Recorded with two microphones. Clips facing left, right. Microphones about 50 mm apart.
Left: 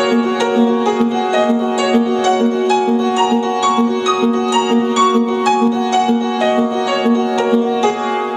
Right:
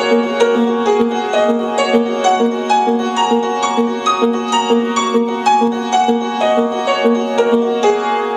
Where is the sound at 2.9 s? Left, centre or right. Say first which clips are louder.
Even; centre.